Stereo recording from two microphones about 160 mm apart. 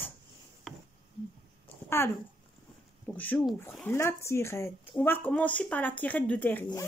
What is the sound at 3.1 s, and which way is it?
Speech, 10° left (ahead or behind).